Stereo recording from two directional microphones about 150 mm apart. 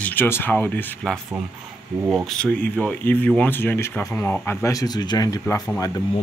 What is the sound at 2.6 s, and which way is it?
Speech, 10° left (ahead or behind).